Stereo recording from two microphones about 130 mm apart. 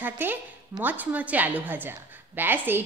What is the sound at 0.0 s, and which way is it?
A woman's voice, 15° right (ahead or behind).